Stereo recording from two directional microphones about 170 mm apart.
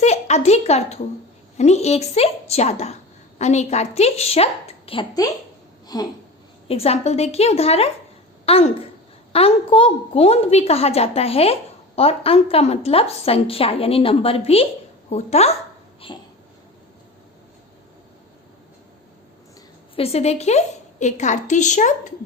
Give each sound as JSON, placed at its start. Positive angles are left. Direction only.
{"t": 0.0, "sound": "a woman's voice", "side_deg": 40}
{"t": 6.7, "sound": "a woman's voice", "side_deg": 35}
{"t": 20.0, "sound": "a woman's voice", "side_deg": 35}